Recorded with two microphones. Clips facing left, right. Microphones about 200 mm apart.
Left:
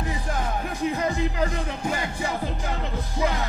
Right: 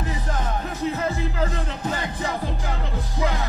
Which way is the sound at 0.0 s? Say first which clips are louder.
Even; 15° left (ahead or behind).